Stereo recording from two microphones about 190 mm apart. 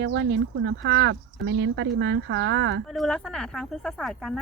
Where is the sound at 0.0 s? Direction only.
65° right (ahead or behind).